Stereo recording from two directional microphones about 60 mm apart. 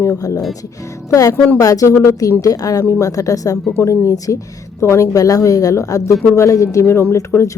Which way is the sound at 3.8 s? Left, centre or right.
Left.